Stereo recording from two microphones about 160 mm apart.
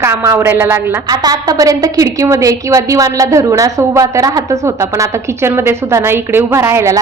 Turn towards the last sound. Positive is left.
turn(degrees=-15)  # may be behind; listen again after turning